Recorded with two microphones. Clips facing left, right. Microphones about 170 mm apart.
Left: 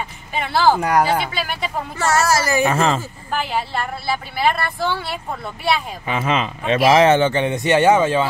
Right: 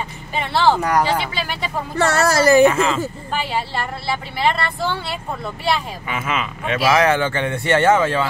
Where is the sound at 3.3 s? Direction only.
Centre (ahead or behind).